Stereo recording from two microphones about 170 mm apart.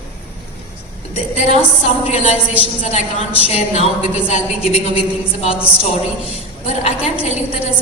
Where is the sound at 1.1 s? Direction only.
40° left (ahead or behind).